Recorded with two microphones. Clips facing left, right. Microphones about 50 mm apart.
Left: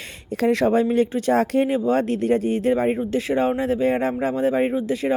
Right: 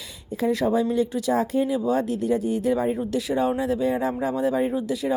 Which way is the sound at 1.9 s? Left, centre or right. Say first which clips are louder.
Left 3 dB; left.